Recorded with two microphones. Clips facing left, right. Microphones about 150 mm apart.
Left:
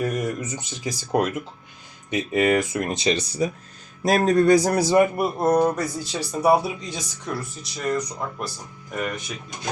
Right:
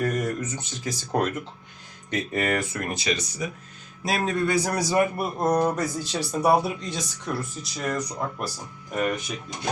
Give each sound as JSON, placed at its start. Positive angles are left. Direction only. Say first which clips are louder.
{"t": 0.0, "sound": "speech", "louder": "left 1 dB", "side_deg": 10}
{"t": 5.1, "sound": "speech", "louder": "left 3 dB", "side_deg": 10}